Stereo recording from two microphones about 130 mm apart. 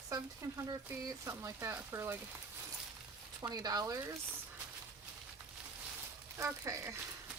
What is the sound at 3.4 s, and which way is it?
Speech, 30° right (ahead or behind).